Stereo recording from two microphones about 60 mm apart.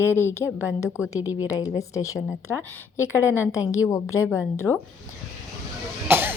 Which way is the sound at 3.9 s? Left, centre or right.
Left.